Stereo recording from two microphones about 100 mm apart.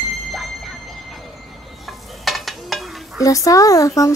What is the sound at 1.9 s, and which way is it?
Stir, centre (ahead or behind).